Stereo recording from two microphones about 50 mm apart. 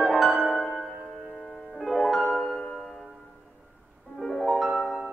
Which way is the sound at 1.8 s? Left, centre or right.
Centre.